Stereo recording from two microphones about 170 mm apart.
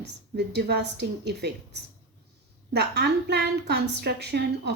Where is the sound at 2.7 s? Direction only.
75° right (ahead or behind).